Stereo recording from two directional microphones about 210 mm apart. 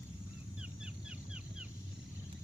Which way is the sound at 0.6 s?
5° right (ahead or behind).